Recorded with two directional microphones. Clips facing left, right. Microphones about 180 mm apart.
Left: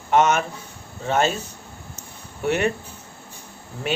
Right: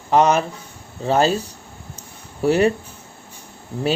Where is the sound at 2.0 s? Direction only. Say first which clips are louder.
Right 8 dB; 35° right (ahead or behind).